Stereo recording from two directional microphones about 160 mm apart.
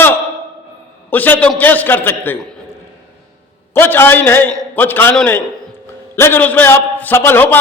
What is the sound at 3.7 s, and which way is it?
A man's voice, 15° left (ahead or behind).